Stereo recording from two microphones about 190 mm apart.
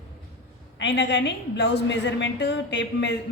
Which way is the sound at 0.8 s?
65° left (ahead or behind).